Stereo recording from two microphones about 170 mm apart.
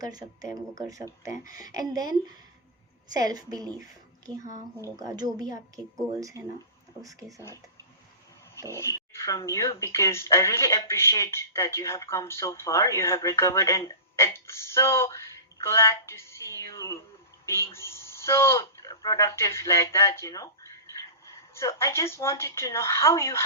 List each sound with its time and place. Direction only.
0.0 s a woman's voice: 20° right (ahead or behind)
1.3 s speech: 55° left (ahead or behind)
1.7 s a woman's voice: 20° right (ahead or behind)
8.7 s speech: 15° left (ahead or behind)